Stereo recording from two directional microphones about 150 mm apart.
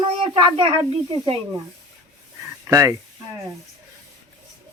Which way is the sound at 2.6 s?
20° right (ahead or behind).